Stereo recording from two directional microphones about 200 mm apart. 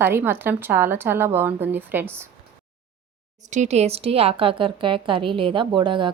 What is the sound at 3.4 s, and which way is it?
A woman's voice, 35° right (ahead or behind).